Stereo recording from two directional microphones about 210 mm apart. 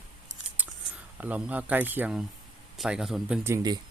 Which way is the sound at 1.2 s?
5° right (ahead or behind).